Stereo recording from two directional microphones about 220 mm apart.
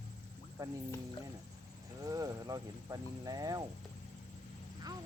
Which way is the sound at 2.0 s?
15° right (ahead or behind).